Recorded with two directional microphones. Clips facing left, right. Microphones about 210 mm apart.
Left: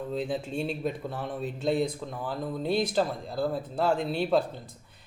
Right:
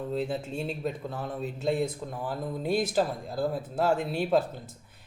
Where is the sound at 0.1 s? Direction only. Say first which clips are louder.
Left 1 dB; 5° right (ahead or behind).